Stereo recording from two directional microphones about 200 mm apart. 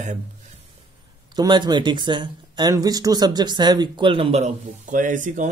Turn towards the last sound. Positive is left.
turn(degrees=-40)  # may be behind; listen again after turning